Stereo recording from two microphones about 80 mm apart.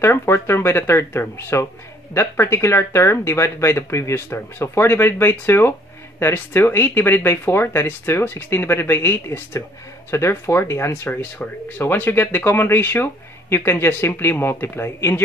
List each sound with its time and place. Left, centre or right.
0.0 s speech: left